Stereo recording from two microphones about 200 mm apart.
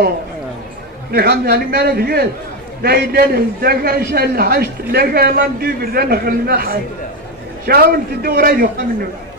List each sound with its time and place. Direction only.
1.1 s a man's voice: 50° right (ahead or behind)